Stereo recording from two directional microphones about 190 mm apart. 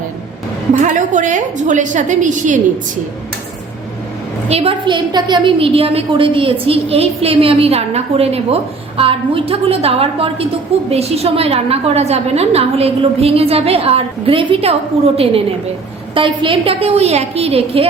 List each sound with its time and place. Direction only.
0.7 s a woman's voice: 40° right (ahead or behind)
4.4 s a woman's voice: 30° right (ahead or behind)